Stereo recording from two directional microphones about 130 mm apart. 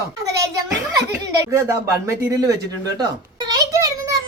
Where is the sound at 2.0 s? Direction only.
25° right (ahead or behind).